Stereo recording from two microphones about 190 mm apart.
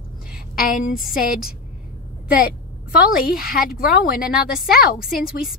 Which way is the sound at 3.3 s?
50° left (ahead or behind).